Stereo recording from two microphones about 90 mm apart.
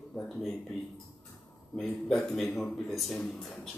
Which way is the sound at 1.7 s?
5° left (ahead or behind).